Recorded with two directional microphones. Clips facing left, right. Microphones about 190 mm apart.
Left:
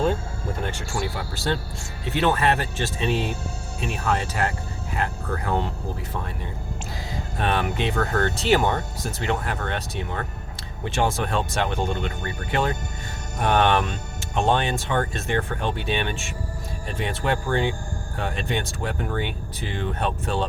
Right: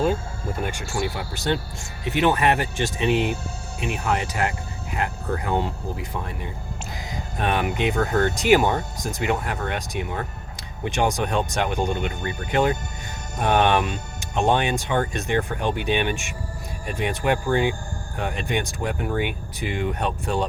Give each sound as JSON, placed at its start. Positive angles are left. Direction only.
{"t": 0.6, "sound": "speech", "side_deg": -15}
{"t": 7.5, "sound": "speech", "side_deg": -15}
{"t": 19.1, "sound": "speech", "side_deg": -15}